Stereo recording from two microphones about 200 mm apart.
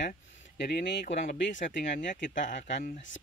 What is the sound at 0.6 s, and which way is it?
Speech, 55° left (ahead or behind).